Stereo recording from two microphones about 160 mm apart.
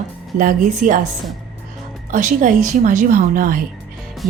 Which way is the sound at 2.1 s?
55° right (ahead or behind).